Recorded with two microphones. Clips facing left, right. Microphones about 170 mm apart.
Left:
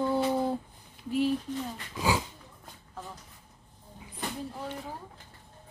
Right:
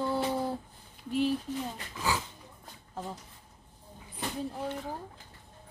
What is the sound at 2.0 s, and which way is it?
Speech, 15° left (ahead or behind).